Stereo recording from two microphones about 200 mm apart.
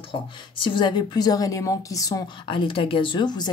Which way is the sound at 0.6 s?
25° left (ahead or behind).